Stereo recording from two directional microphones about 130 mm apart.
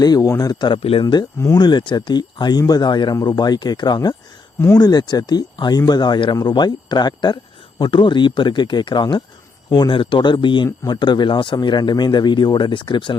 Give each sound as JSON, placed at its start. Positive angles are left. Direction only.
{"t": 0.0, "sound": "speech", "side_deg": 30}
{"t": 1.0, "sound": "speech", "side_deg": 35}